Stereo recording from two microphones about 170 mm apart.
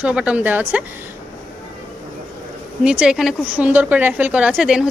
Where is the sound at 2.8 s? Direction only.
5° right (ahead or behind).